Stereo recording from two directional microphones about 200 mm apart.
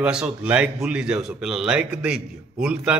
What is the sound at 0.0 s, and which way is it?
A man's voice, 5° right (ahead or behind).